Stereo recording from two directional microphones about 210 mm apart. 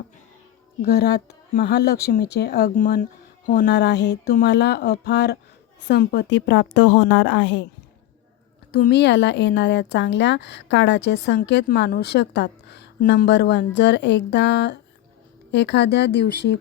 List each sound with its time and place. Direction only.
0.8 s speech: 50° left (ahead or behind)
3.7 s speech: 55° left (ahead or behind)
8.7 s speech: 50° left (ahead or behind)